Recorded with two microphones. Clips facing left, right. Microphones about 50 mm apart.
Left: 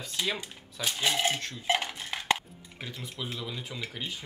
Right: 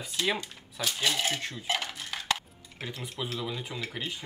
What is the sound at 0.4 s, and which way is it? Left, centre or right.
Speech, centre.